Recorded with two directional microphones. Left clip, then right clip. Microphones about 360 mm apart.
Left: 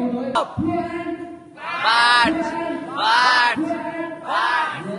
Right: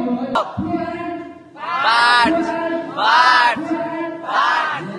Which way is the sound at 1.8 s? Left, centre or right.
Centre.